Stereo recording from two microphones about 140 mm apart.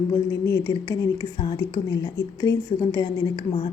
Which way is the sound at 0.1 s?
20° left (ahead or behind).